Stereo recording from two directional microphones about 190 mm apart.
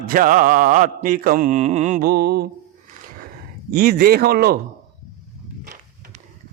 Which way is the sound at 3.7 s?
50° right (ahead or behind).